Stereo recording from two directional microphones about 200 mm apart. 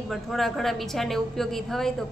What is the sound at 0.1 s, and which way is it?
A woman's voice, centre (ahead or behind).